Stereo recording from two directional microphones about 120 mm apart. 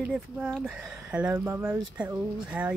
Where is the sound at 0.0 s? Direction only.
10° right (ahead or behind).